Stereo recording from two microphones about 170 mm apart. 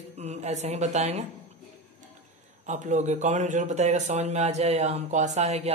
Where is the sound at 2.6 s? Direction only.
45° right (ahead or behind).